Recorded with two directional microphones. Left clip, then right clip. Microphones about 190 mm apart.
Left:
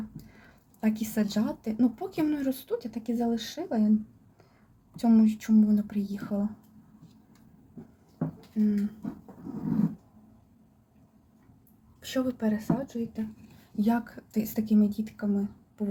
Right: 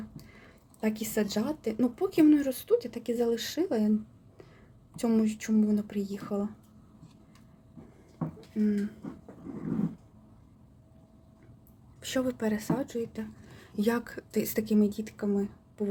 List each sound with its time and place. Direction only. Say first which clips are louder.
0.8 s speech: even; 15° right (ahead or behind)
4.9 s speech: left 4 dB; 20° right (ahead or behind)
8.6 s speech: left 1 dB; 25° right (ahead or behind)
12.0 s speech: even; 20° right (ahead or behind)